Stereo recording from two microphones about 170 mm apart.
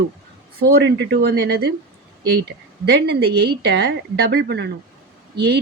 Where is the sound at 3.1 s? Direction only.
75° right (ahead or behind).